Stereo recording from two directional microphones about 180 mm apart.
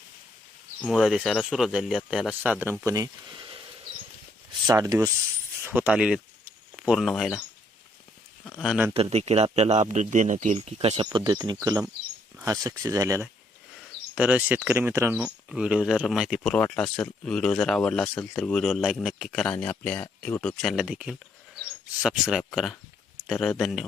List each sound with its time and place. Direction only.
0.8 s speech: centre (ahead or behind); by 3.1 s 20° right (ahead or behind)
4.6 s speech: 20° right (ahead or behind)
5.6 s speech: 10° right (ahead or behind)
8.4 s a sound: 5° left (ahead or behind)
8.9 s a man's voice: 35° right (ahead or behind); by 15.3 s 15° right (ahead or behind)
15.4 s speech: 5° right (ahead or behind)